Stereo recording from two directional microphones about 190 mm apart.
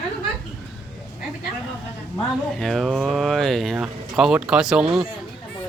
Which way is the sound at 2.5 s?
Centre (ahead or behind).